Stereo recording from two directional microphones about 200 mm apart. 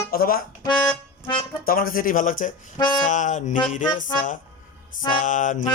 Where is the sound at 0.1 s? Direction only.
50° left (ahead or behind).